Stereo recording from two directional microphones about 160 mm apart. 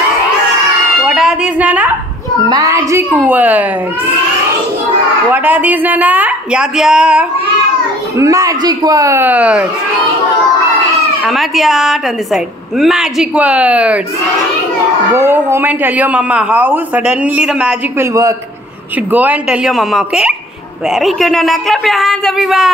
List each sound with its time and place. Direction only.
1.0 s a woman's voice: 5° right (ahead or behind)
2.5 s a man's voice: 20° right (ahead or behind)
5.3 s a man's voice: 10° right (ahead or behind)
8.2 s a man's voice: 20° right (ahead or behind)
11.2 s a woman's voice: centre (ahead or behind)
15.1 s a man's voice: 15° right (ahead or behind)
19.1 s a woman's voice: 10° right (ahead or behind)